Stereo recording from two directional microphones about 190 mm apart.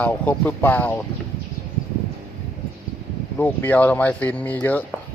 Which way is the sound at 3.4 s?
10° left (ahead or behind).